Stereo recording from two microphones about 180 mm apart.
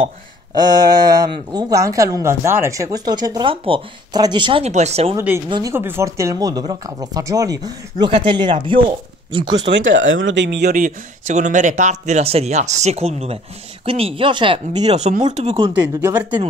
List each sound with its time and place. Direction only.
0.6 s speech: 20° right (ahead or behind); by 5.1 s 35° right (ahead or behind)
5.1 s speech: 10° right (ahead or behind)
9.7 s speech: 90° right
10.7 s speech: 45° right (ahead or behind)
15.5 s speech: 20° right (ahead or behind)